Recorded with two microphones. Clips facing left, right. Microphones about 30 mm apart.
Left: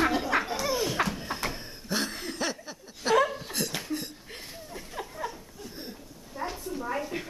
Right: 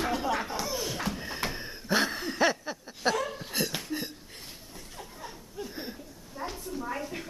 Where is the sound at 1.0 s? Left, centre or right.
Left.